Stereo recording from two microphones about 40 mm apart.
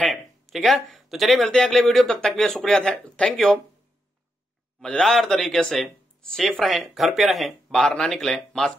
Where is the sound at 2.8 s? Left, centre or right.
Left.